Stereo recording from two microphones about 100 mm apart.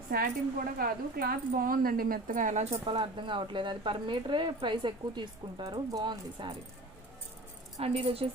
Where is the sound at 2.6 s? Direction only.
70° right (ahead or behind).